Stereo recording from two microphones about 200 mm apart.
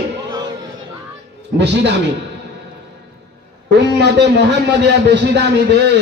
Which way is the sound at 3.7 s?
60° right (ahead or behind).